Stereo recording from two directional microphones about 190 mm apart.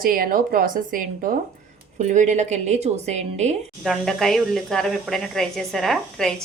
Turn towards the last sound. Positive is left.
turn(degrees=0)  # may be behind; listen again after turning